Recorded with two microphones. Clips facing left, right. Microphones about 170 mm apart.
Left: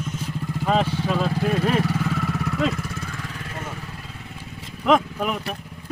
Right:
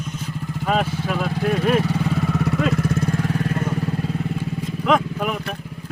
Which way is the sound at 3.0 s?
40° right (ahead or behind).